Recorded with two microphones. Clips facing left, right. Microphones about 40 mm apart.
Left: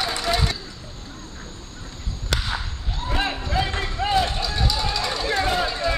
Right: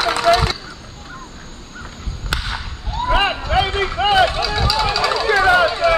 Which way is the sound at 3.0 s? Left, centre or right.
Right.